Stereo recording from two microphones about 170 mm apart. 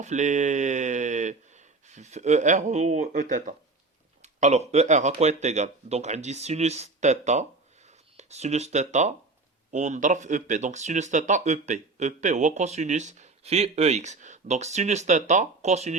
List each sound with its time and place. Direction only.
0.0 s speech: 45° right (ahead or behind)